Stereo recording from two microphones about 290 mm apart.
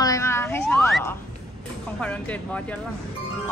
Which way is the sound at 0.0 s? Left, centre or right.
Centre.